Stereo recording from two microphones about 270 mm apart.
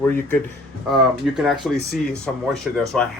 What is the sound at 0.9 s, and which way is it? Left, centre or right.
Speech, centre.